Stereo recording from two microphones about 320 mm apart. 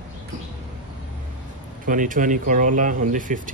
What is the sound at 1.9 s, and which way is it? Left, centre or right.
Speech, right.